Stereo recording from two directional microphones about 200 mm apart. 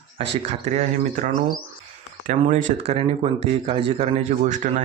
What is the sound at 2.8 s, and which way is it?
Speech, 30° right (ahead or behind).